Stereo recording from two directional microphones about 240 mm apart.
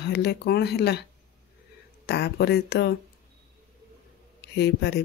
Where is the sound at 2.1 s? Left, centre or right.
Left.